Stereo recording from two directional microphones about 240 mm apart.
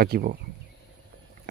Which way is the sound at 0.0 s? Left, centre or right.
Right.